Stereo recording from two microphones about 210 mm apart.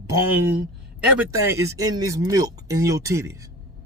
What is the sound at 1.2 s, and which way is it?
Speech, 10° right (ahead or behind).